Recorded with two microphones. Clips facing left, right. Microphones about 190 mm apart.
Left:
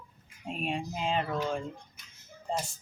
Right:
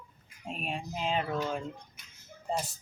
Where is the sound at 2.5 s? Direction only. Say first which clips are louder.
Even; 10° right (ahead or behind).